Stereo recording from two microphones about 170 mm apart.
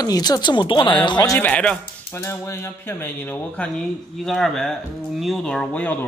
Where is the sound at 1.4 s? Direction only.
5° left (ahead or behind).